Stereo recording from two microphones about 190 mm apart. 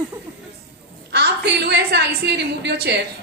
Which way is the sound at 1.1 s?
60° right (ahead or behind).